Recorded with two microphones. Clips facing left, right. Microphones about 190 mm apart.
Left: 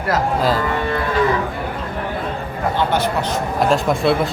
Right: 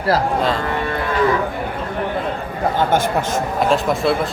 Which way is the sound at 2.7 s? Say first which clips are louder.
Right 1 dB; 50° right (ahead or behind).